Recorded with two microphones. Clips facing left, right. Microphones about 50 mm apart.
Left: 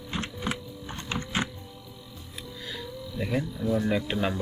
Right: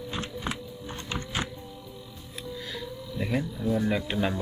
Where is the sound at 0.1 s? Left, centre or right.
Left.